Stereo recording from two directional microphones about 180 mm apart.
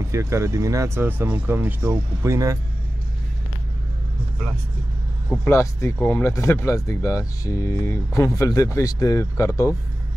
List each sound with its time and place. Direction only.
0.1 s speech: 15° right (ahead or behind)
5.4 s speech: 15° left (ahead or behind)